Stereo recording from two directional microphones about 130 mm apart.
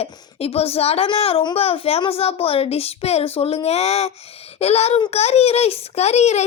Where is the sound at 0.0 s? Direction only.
50° left (ahead or behind).